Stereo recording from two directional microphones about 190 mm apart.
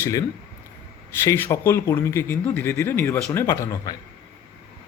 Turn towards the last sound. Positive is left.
turn(degrees=15)  # may be behind; listen again after turning